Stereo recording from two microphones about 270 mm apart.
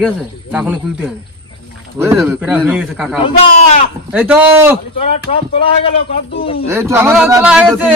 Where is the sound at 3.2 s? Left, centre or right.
Left.